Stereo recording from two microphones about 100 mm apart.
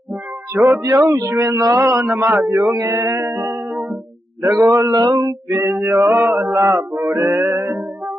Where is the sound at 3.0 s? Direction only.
45° right (ahead or behind).